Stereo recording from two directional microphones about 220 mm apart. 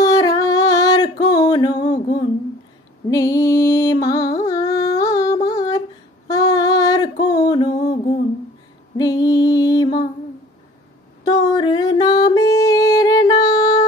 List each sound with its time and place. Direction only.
0.0 s singing: 15° left (ahead or behind)
1.2 s music: 15° left (ahead or behind)
6.2 s a sound: 15° left (ahead or behind)
8.9 s music: 15° left (ahead or behind)
11.2 s music: 20° left (ahead or behind)